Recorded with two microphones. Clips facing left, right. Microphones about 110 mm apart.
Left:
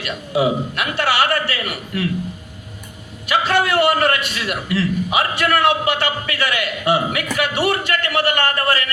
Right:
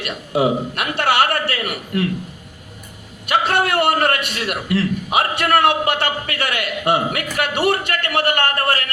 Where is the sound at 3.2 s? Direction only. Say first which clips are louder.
Even; 55° right (ahead or behind).